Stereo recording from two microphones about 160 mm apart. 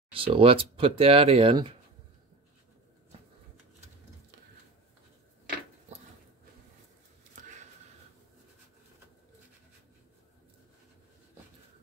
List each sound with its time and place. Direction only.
0.1 s speech: 35° right (ahead or behind)